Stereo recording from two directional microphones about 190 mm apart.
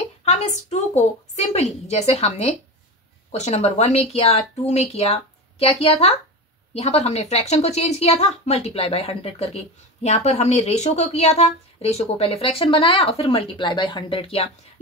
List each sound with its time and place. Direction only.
0.2 s a woman's voice: 35° left (ahead or behind)